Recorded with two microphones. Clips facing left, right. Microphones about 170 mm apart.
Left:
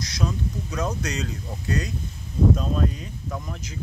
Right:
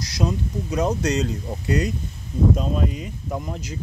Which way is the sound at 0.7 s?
35° right (ahead or behind).